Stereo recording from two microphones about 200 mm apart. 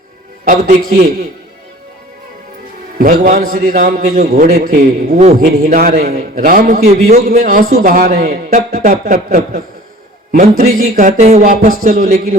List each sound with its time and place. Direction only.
0.4 s speech: 40° right (ahead or behind)
3.0 s a man's voice: 40° right (ahead or behind)
10.6 s speech: 40° right (ahead or behind)